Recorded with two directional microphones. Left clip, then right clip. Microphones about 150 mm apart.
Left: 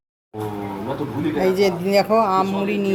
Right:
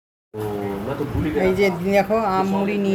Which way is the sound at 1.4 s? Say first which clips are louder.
Even; 20° left (ahead or behind).